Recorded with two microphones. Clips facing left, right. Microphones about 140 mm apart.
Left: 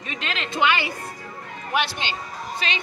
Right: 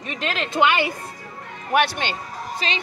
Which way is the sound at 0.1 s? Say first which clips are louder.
Right 4 dB; 50° right (ahead or behind).